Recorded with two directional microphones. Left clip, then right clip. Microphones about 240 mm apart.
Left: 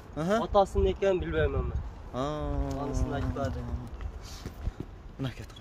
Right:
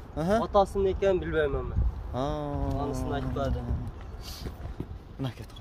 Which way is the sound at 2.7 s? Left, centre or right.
Right.